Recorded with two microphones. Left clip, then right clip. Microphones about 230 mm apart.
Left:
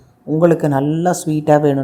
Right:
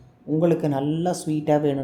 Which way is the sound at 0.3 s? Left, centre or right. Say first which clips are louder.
Left 8 dB; left.